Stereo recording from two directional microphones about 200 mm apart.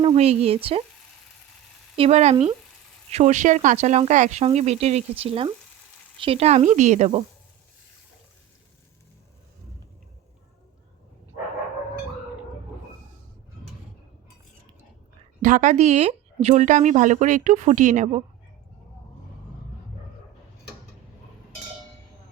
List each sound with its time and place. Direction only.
0.0 s speech: 30° right (ahead or behind)
2.0 s speech: 35° right (ahead or behind)
15.4 s speech: 40° right (ahead or behind)